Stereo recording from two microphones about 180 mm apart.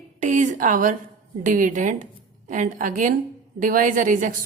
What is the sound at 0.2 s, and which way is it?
A woman's voice, 45° right (ahead or behind).